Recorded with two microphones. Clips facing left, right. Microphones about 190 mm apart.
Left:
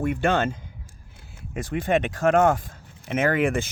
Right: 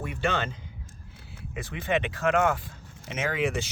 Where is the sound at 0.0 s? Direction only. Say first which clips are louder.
Left 7 dB; 50° left (ahead or behind).